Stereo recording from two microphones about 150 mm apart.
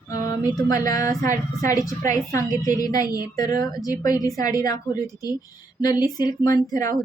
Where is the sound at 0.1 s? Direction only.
25° left (ahead or behind).